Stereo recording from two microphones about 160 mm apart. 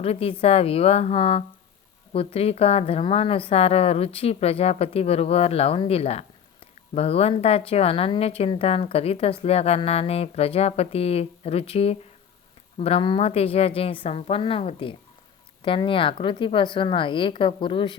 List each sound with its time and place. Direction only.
0.0 s a woman's voice: 40° left (ahead or behind)